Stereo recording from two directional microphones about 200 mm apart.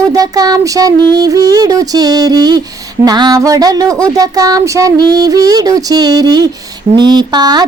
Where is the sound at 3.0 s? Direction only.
20° right (ahead or behind).